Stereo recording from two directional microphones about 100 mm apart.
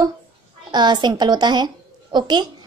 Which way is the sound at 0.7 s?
50° right (ahead or behind).